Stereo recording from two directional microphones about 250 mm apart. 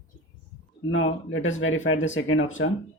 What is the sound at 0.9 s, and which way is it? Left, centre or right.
Speech, left.